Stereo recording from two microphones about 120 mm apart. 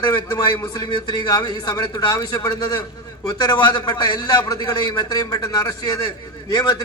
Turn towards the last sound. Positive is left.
turn(degrees=35)  # may be behind; listen again after turning